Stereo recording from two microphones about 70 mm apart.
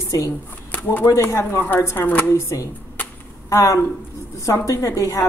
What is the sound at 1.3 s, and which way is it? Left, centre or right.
A woman's voice, left.